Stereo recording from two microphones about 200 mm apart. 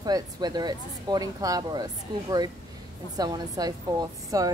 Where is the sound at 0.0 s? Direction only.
20° right (ahead or behind).